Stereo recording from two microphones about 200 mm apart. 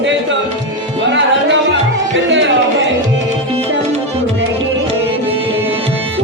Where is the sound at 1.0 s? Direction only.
65° right (ahead or behind).